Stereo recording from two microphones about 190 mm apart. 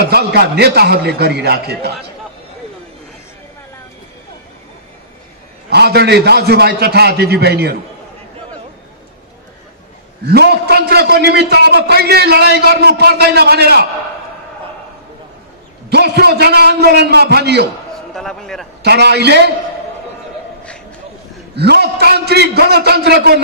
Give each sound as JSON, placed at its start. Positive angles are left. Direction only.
{"t": 0.0, "sound": "a man's voice", "side_deg": -55}
{"t": 5.7, "sound": "a man's voice", "side_deg": -60}
{"t": 10.2, "sound": "a man's voice", "side_deg": -55}
{"t": 15.9, "sound": "a man's voice", "side_deg": -60}
{"t": 17.9, "sound": "a sound", "side_deg": 0}
{"t": 18.8, "sound": "a man's voice", "side_deg": -60}
{"t": 21.5, "sound": "a man's voice", "side_deg": -60}